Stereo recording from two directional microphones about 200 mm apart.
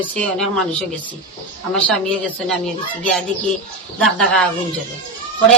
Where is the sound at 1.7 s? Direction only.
5° left (ahead or behind).